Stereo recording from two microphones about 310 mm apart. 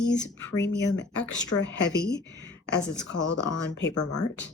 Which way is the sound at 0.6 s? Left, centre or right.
Left.